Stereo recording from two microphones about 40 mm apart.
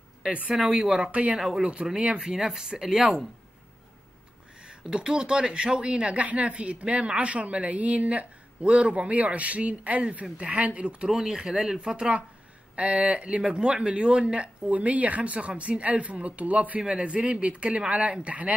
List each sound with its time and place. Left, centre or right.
0.2 s speech: right
4.6 s speech: right
11.1 s speech: centre
12.7 s speech: right
16.8 s speech: right